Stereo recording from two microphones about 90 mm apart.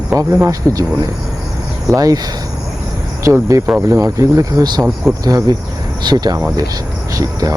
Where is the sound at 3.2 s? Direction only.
35° right (ahead or behind).